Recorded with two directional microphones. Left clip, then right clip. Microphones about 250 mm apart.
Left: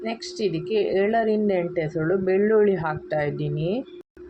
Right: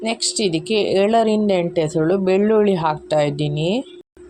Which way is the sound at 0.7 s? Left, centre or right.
Right.